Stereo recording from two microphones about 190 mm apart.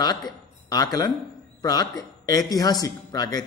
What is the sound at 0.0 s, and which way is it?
A man's voice, 20° left (ahead or behind).